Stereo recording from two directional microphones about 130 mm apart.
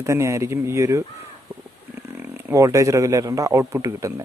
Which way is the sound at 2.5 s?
25° right (ahead or behind).